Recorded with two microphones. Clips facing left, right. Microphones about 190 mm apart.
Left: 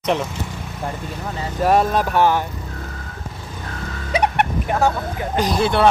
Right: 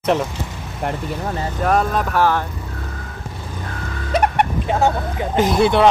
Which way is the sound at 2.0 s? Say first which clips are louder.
Left 1 dB; 25° left (ahead or behind).